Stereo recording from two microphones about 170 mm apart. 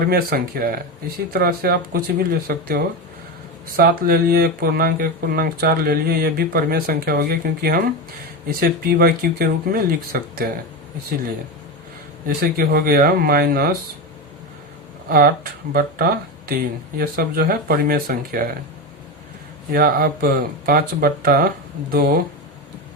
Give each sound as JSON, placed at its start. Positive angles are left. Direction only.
{"t": 0.1, "sound": "speech", "side_deg": -60}
{"t": 12.2, "sound": "speech", "side_deg": -60}
{"t": 15.1, "sound": "speech", "side_deg": -60}
{"t": 19.7, "sound": "speech", "side_deg": -60}